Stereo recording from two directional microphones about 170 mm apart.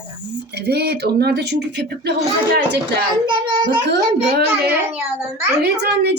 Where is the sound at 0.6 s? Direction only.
70° right (ahead or behind).